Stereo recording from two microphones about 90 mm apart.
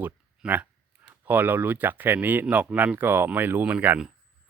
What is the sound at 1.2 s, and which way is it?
Speech, 20° right (ahead or behind).